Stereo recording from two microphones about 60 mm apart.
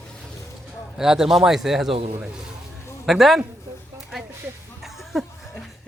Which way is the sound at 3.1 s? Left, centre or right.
Centre.